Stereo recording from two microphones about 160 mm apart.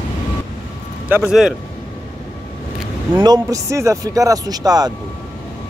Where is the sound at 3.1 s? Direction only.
25° right (ahead or behind).